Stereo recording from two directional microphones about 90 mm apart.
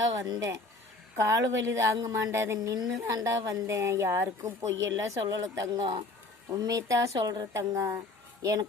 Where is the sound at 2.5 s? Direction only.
45° right (ahead or behind).